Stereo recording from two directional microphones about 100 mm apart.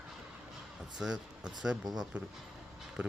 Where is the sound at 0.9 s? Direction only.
5° right (ahead or behind).